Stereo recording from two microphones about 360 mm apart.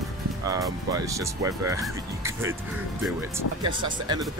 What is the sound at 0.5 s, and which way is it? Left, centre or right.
Speech, centre.